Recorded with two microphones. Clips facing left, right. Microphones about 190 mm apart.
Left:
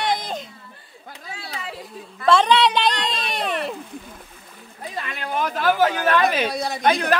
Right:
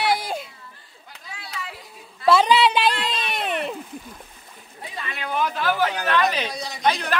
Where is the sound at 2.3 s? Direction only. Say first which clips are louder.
Even; 5° right (ahead or behind).